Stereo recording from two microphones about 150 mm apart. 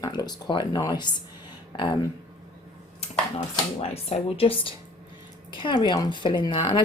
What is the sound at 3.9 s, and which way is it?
A woman's voice, 45° left (ahead or behind).